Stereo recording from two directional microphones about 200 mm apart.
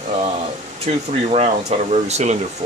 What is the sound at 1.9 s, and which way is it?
Speech, 35° right (ahead or behind).